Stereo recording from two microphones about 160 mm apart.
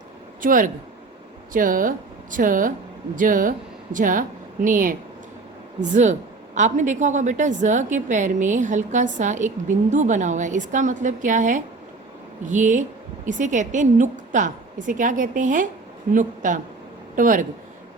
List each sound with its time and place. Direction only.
0.4 s a woman's voice: 60° right (ahead or behind)